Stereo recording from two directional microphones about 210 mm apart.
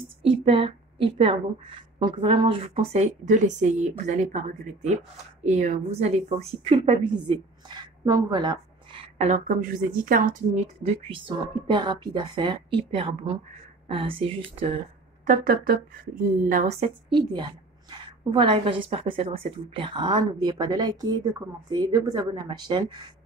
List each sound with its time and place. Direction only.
0.2 s a woman's voice: 25° right (ahead or behind)
9.0 s a woman's voice: 35° right (ahead or behind)
15.2 s a woman's voice: 45° right (ahead or behind); by 23.0 s 20° right (ahead or behind)